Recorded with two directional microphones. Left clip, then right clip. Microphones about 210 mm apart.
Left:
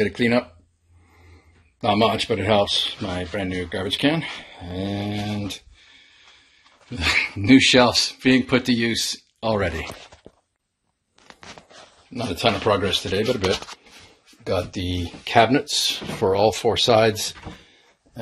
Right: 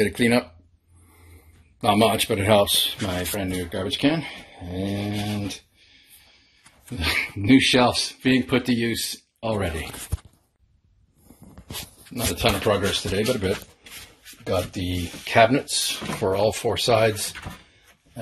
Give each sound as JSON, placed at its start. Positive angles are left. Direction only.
{"t": 0.0, "sound": "speech", "side_deg": 0}
{"t": 1.8, "sound": "speech", "side_deg": 0}
{"t": 7.0, "sound": "speech", "side_deg": 10}
{"t": 12.1, "sound": "speech", "side_deg": 0}
{"t": 14.4, "sound": "speech", "side_deg": 5}